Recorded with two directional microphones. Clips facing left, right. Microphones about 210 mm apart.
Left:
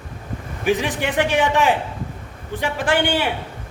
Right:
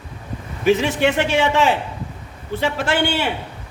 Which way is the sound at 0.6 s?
15° left (ahead or behind).